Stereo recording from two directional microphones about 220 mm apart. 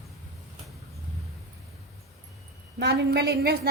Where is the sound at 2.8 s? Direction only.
45° right (ahead or behind).